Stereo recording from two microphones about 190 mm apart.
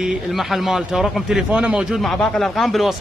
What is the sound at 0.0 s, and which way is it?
Speech, centre (ahead or behind).